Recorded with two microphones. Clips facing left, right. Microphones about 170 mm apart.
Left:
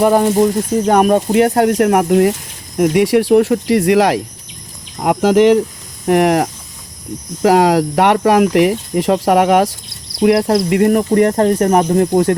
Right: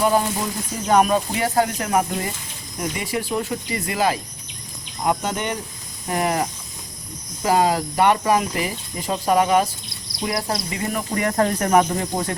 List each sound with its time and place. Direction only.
0.0 s speech: 50° left (ahead or behind); by 5.5 s 85° left
6.1 s speech: 75° left (ahead or behind); by 11.3 s 50° left (ahead or behind)
11.3 s speech: 30° left (ahead or behind)
12.1 s speech: 55° left (ahead or behind)